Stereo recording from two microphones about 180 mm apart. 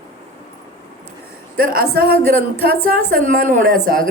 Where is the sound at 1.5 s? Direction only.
55° right (ahead or behind).